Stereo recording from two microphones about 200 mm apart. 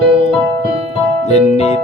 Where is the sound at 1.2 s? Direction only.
35° left (ahead or behind).